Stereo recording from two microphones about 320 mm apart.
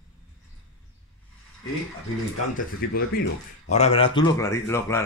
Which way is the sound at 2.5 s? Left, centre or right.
Left.